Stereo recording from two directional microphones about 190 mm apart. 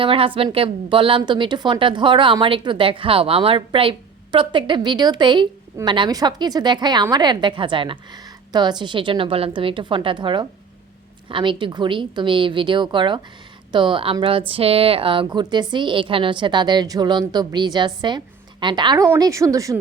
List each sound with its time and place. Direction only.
0.0 s a woman's voice: 30° right (ahead or behind)